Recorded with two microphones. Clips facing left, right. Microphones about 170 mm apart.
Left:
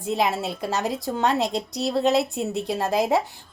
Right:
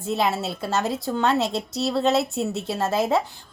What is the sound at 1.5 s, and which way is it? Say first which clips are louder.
Speech: even; 15° left (ahead or behind).